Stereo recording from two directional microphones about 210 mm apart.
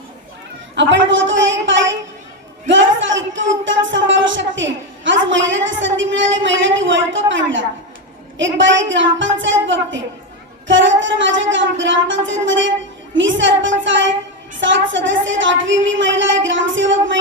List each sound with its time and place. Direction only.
0.8 s speech: 60° right (ahead or behind)